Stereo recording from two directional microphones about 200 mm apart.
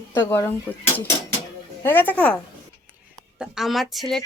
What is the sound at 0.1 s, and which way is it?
Speech, 10° left (ahead or behind).